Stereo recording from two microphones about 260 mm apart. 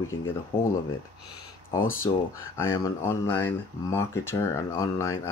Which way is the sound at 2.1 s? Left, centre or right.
Centre.